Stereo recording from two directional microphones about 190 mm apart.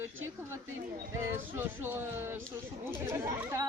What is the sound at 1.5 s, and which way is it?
Speech, 10° right (ahead or behind).